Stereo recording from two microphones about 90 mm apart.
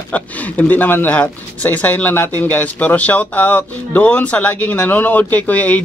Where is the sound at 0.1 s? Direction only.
15° left (ahead or behind).